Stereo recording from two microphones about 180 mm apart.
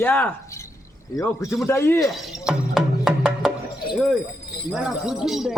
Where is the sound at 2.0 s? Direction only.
Centre (ahead or behind).